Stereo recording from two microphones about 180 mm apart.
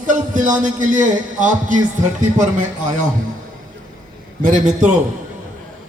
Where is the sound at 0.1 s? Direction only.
45° right (ahead or behind).